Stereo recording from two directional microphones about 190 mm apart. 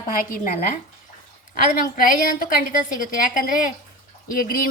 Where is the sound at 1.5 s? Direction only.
50° left (ahead or behind).